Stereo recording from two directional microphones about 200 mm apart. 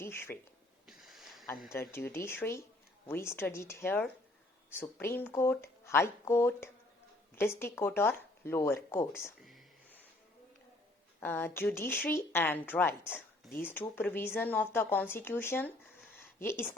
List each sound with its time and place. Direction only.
0.0 s speech: 10° left (ahead or behind)
0.9 s snort: centre (ahead or behind)
1.7 s speech: 10° left (ahead or behind)
9.4 s a sound: centre (ahead or behind)
11.2 s speech: 10° left (ahead or behind)